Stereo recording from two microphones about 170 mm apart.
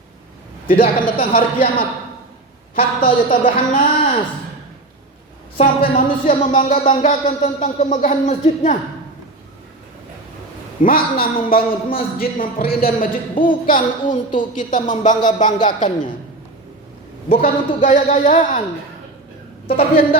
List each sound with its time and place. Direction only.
0.7 s speech: 55° left (ahead or behind)
3.0 s speech: 50° left (ahead or behind)
5.5 s speech: 50° left (ahead or behind)
10.8 s a man's voice: 55° left (ahead or behind)
17.3 s speech: 50° left (ahead or behind)
19.6 s a woman's voice: 35° left (ahead or behind)